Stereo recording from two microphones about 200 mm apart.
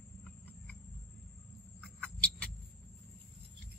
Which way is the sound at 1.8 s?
5° left (ahead or behind).